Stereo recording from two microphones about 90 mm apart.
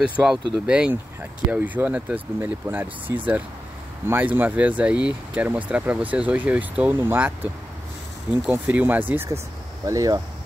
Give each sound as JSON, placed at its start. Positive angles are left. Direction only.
{"t": 0.0, "sound": "speech", "side_deg": -10}
{"t": 9.8, "sound": "speech", "side_deg": -40}